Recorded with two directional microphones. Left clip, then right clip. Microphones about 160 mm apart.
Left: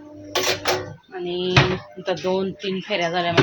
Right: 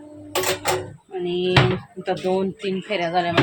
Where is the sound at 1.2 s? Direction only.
5° right (ahead or behind).